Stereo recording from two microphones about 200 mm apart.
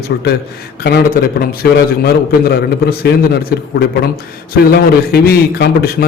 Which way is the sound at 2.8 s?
55° left (ahead or behind).